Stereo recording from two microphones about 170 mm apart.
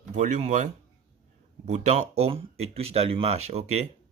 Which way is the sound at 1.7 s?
40° right (ahead or behind).